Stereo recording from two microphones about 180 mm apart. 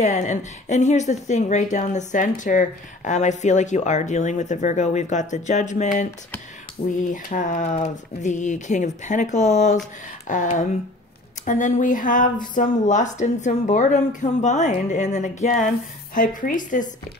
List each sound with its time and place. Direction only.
0.0 s speech: 40° left (ahead or behind)
7.1 s speech: 45° left (ahead or behind)